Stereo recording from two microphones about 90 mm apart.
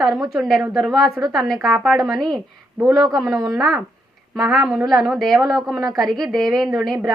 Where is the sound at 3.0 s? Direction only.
45° right (ahead or behind).